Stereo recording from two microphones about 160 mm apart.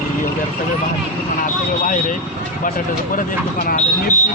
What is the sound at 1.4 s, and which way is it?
Speech, 55° left (ahead or behind).